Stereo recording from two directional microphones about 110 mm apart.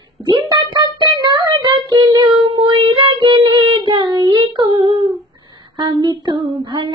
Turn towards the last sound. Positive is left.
turn(degrees=-45)  # may be behind; listen again after turning